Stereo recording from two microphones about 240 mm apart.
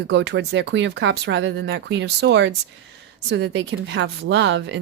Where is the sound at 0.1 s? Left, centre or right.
Right.